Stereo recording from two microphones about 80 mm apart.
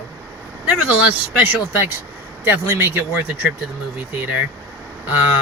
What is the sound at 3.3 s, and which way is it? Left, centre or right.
Speech, centre.